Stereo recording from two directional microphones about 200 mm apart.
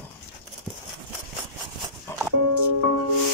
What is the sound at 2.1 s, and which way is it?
Music, 15° left (ahead or behind).